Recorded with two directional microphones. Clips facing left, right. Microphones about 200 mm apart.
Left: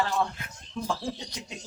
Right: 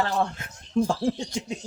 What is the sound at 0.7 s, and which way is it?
Speech, 50° right (ahead or behind).